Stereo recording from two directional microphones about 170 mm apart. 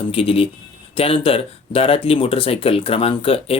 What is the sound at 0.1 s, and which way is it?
Speech, 35° left (ahead or behind).